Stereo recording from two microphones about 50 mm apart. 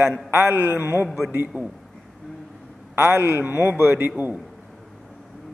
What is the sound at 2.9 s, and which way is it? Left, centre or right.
A man's voice, right.